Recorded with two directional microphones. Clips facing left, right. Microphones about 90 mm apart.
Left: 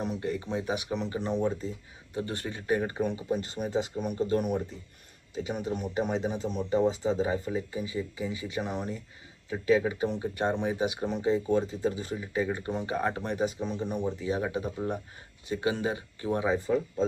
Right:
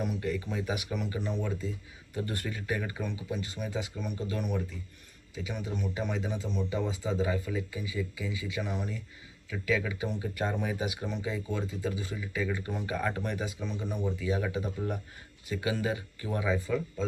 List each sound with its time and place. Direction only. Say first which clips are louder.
0.0 s speech: left 1 dB; 30° left (ahead or behind)